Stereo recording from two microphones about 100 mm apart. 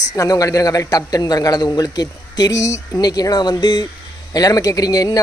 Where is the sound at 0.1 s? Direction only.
35° left (ahead or behind).